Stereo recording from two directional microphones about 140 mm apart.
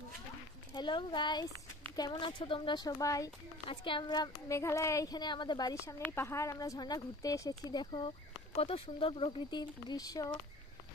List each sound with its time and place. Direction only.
0.7 s speech: 35° left (ahead or behind)
3.6 s speech: 35° left (ahead or behind)